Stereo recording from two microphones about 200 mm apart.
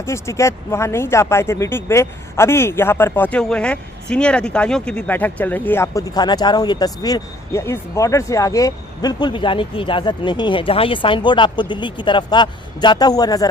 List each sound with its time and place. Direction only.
0.0 s speech: 15° left (ahead or behind)